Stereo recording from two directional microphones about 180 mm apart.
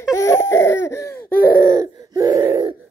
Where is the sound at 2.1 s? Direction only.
15° right (ahead or behind).